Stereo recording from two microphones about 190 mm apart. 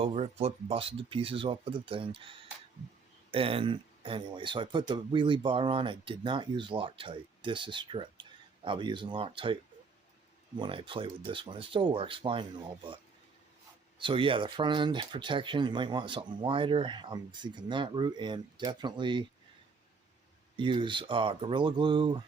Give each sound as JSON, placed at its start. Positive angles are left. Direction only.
{"t": 0.0, "sound": "speech", "side_deg": -30}
{"t": 10.6, "sound": "speech", "side_deg": -25}
{"t": 14.0, "sound": "speech", "side_deg": -25}
{"t": 20.6, "sound": "speech", "side_deg": -25}